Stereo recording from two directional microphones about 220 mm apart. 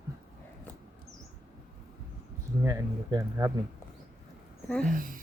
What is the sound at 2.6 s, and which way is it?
Speech, 15° right (ahead or behind).